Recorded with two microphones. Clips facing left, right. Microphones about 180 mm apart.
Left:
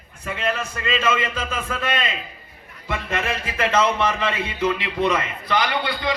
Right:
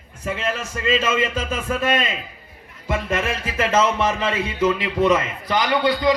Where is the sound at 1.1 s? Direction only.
40° right (ahead or behind).